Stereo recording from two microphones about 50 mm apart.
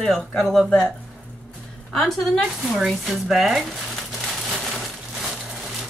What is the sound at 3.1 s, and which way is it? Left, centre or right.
Speech, centre.